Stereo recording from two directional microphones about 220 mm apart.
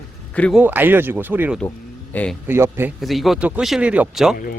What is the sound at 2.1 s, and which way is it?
Speech, 5° left (ahead or behind).